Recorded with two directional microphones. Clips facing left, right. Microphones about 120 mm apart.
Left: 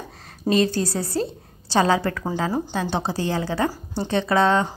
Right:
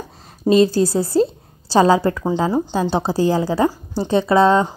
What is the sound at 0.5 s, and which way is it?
A woman's voice, 30° right (ahead or behind).